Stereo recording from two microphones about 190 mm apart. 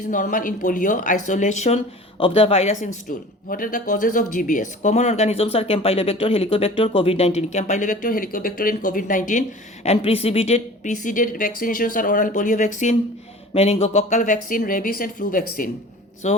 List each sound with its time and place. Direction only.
0.1 s speech: 45° left (ahead or behind)
9.8 s speech: 30° left (ahead or behind); by 15.7 s 50° left (ahead or behind)
16.2 s speech: 35° left (ahead or behind)